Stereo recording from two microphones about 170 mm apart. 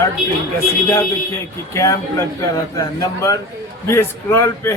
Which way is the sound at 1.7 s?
20° left (ahead or behind).